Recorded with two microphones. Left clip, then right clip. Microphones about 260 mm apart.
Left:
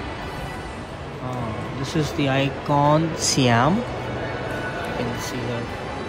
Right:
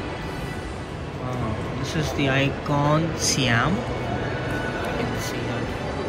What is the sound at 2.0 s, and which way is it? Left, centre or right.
Speech, centre.